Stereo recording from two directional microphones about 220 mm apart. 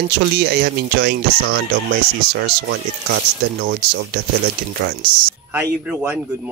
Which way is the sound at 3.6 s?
45° right (ahead or behind).